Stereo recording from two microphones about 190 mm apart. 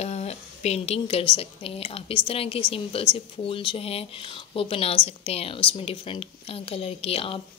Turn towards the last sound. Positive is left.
turn(degrees=30)  # may be behind; listen again after turning